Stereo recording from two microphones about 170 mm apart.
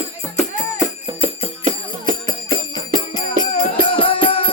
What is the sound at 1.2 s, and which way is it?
Music, 40° right (ahead or behind).